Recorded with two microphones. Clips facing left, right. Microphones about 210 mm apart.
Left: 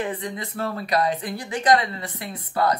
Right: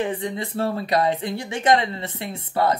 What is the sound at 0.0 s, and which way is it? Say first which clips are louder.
Speech: right 3 dB; 25° right (ahead or behind).